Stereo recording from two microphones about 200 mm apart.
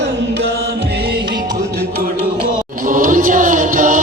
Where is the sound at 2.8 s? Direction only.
40° right (ahead or behind).